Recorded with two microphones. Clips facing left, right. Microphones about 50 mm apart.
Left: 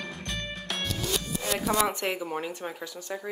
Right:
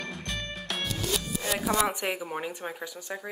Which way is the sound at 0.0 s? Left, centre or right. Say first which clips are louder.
Even; centre.